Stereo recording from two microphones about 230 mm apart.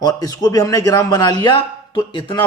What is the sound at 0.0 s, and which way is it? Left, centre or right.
A man's voice, centre.